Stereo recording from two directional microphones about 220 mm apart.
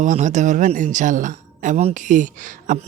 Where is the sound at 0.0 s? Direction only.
35° right (ahead or behind).